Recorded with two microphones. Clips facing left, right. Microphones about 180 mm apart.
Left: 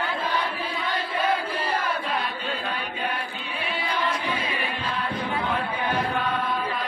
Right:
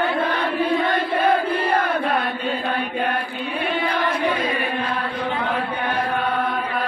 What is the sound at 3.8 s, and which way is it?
Choir, 60° right (ahead or behind).